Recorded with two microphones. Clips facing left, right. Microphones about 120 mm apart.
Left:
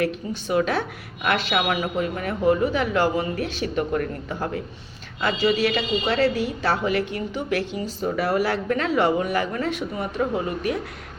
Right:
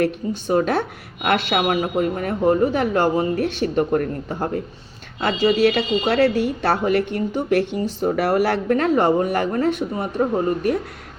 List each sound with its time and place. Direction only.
0.0 s speech: 45° right (ahead or behind)